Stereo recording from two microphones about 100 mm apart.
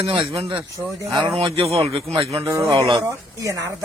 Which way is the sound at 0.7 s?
35° right (ahead or behind).